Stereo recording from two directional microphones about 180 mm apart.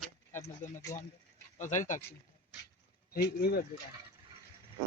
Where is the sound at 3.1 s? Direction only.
60° left (ahead or behind).